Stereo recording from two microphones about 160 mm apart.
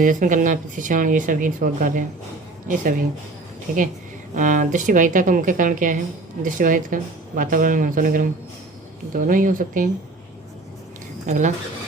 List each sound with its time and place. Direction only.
0.0 s speech: 55° right (ahead or behind)
4.4 s speech: 55° right (ahead or behind)
11.3 s speech: 50° right (ahead or behind)